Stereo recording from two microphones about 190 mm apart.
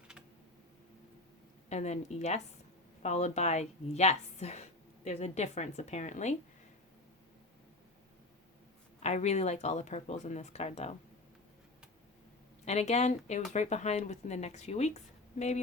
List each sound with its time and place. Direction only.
1.7 s speech: 35° left (ahead or behind)
9.0 s speech: 35° left (ahead or behind)
12.6 s speech: 35° left (ahead or behind)